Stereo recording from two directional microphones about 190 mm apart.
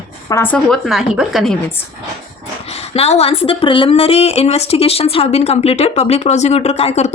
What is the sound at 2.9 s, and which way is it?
A woman's voice, 30° left (ahead or behind).